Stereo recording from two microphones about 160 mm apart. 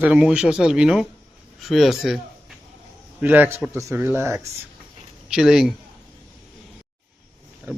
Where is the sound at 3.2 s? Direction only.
10° right (ahead or behind).